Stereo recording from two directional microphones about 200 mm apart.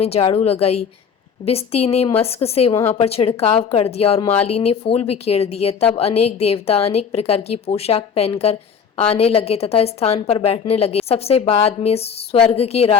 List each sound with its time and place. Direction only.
0.0 s a woman's voice: 30° left (ahead or behind)